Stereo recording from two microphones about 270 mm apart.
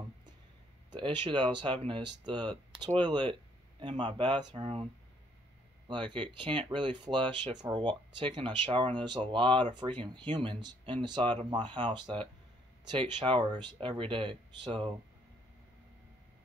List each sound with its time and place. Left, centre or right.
0.9 s speech: centre
5.9 s speech: centre